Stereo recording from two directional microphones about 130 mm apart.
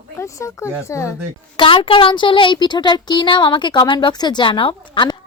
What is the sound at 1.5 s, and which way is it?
Speech, 40° left (ahead or behind).